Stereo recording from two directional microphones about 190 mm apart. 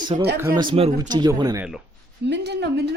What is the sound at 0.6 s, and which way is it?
Speech, 30° right (ahead or behind).